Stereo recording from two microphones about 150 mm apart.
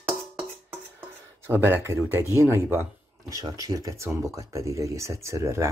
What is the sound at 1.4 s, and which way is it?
Speech, 15° right (ahead or behind).